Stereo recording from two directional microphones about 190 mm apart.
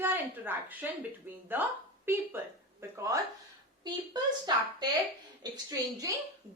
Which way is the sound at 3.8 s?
20° right (ahead or behind).